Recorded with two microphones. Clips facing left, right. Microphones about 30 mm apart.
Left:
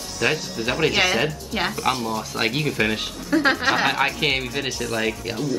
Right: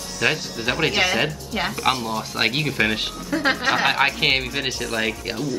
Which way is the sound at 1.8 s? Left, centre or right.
Centre.